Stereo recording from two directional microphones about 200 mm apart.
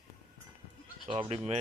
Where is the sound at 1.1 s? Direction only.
25° right (ahead or behind).